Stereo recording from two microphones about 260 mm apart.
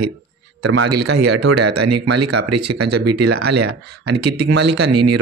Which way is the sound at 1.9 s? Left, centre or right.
Right.